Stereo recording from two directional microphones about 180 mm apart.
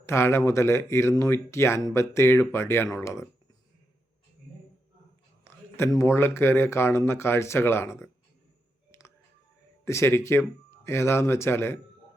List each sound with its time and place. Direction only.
0.0 s speech: 15° left (ahead or behind)
5.5 s a sound: 15° left (ahead or behind)
6.0 s speech: 15° left (ahead or behind)
8.9 s music: 15° left (ahead or behind)
9.8 s speech: 15° left (ahead or behind)